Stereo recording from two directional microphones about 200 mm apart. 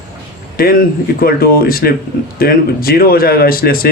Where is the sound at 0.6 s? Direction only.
45° left (ahead or behind).